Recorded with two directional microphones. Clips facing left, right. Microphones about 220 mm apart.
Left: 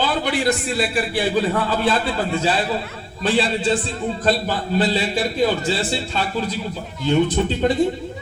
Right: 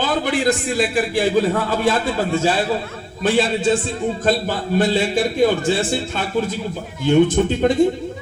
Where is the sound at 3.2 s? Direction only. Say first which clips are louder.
Right 2 dB; 50° right (ahead or behind).